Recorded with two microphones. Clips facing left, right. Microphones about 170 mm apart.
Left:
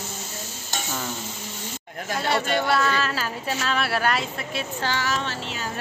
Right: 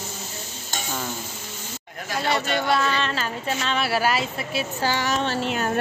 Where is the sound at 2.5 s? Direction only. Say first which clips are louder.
Left 1 dB; centre (ahead or behind).